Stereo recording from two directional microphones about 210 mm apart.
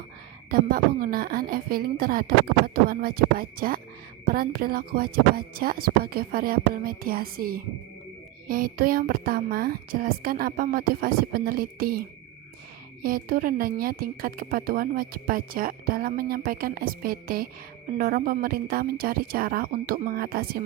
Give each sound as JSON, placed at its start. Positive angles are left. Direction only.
{"t": 0.5, "sound": "a woman's voice", "side_deg": -40}